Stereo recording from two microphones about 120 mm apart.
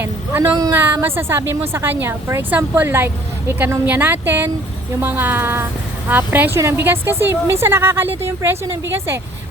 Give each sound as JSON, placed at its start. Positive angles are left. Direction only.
{"t": 0.0, "sound": "a woman's voice", "side_deg": -20}